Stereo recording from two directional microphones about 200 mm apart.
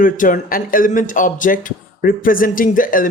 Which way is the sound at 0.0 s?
40° left (ahead or behind).